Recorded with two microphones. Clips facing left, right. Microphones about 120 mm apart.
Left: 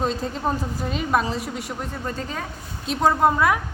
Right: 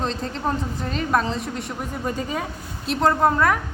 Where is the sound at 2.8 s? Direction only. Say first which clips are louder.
Even; centre (ahead or behind).